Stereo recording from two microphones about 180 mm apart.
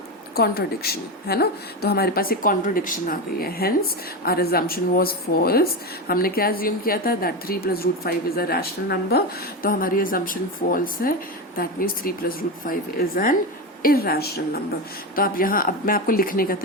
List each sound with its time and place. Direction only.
0.3 s speech: 60° left (ahead or behind)